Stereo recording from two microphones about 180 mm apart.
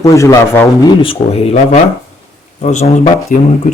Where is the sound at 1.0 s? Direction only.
35° left (ahead or behind).